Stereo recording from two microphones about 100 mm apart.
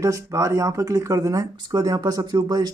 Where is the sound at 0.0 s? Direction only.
30° right (ahead or behind).